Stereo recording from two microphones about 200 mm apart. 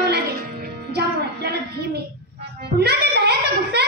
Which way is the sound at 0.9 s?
55° right (ahead or behind).